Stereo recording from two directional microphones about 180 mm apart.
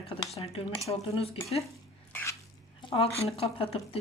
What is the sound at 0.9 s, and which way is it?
Speech, 15° left (ahead or behind).